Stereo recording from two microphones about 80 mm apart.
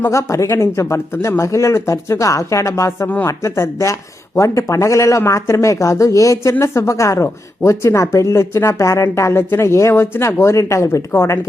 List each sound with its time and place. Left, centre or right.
0.1 s speech: left